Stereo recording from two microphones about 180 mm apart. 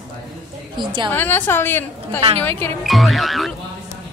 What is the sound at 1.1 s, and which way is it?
A woman's voice, 10° left (ahead or behind).